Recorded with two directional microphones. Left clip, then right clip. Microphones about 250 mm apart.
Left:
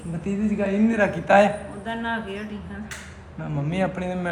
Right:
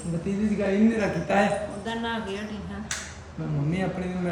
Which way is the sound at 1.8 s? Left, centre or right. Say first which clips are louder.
Left 2 dB; centre.